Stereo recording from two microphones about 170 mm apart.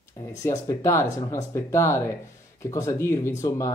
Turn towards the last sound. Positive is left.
turn(degrees=20)  # may be behind; listen again after turning